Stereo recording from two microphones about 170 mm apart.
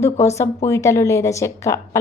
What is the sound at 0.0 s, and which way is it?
A woman's voice, 15° left (ahead or behind).